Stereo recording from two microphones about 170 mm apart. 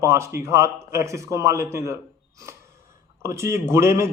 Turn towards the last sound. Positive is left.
turn(degrees=-15)  # may be behind; listen again after turning